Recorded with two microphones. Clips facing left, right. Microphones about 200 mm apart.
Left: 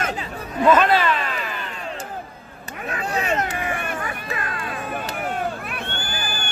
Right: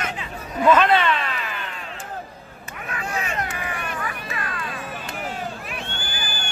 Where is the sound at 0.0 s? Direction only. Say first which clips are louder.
Left 3 dB; 35° left (ahead or behind).